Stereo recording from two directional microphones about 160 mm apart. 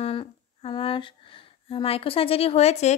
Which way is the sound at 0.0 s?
35° left (ahead or behind).